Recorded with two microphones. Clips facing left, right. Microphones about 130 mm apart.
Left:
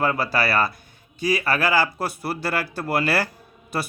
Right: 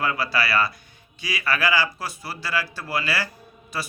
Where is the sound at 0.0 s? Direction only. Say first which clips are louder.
Left 3 dB; 45° left (ahead or behind).